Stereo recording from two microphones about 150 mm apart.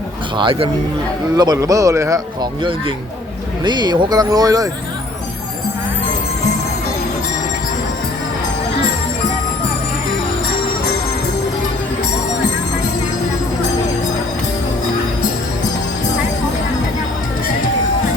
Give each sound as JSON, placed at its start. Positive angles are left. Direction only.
{"t": 0.3, "sound": "a man's voice", "side_deg": -35}
{"t": 3.6, "sound": "a man's voice", "side_deg": -30}